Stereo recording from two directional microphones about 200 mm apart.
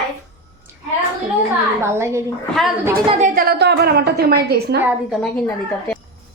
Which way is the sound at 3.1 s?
35° right (ahead or behind).